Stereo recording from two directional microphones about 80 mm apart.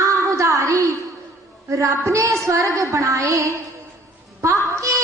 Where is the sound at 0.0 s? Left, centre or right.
Right.